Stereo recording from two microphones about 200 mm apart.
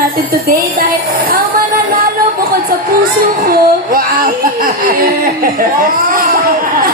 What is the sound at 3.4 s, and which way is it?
Speech, 45° right (ahead or behind).